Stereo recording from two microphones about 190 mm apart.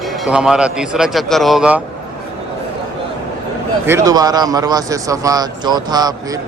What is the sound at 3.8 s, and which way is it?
A man's voice, 15° right (ahead or behind).